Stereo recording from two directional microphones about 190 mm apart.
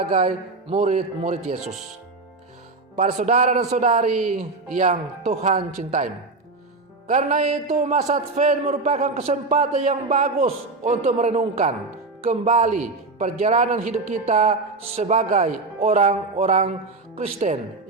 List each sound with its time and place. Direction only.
0.1 s a man's voice: 30° right (ahead or behind)
2.9 s a man's voice: 35° right (ahead or behind)
7.1 s a man's voice: 40° right (ahead or behind)